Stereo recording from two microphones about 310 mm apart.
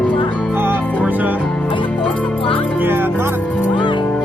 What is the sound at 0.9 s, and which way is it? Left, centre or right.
Music, centre.